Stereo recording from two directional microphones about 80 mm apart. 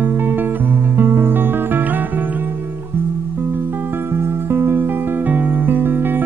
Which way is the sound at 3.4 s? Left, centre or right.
Right.